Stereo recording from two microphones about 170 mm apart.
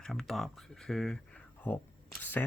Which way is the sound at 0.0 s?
Centre (ahead or behind).